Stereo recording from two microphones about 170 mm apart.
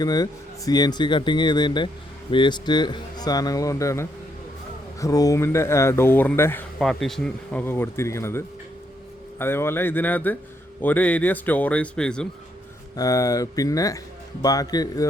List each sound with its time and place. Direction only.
0.0 s speech: 25° left (ahead or behind)
6.7 s speech: centre (ahead or behind)
7.6 s speech: 15° left (ahead or behind)
13.0 s speech: 20° left (ahead or behind)